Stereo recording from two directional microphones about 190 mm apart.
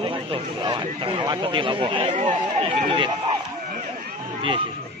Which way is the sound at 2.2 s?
40° right (ahead or behind).